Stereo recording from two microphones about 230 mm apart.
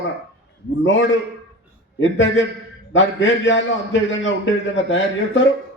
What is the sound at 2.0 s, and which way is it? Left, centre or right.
A man's voice, left.